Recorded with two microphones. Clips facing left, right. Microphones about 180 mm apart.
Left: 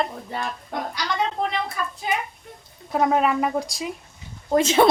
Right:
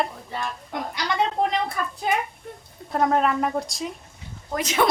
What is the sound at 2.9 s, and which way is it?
Speech, 5° left (ahead or behind).